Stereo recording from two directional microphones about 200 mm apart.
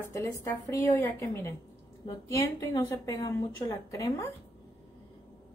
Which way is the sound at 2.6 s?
15° left (ahead or behind).